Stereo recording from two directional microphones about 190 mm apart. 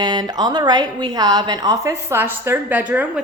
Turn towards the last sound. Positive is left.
turn(degrees=-5)  # may be behind; listen again after turning